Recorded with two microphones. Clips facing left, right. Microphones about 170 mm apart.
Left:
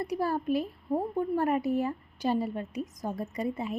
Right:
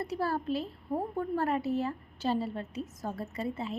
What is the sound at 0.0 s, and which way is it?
A woman's voice, 15° left (ahead or behind).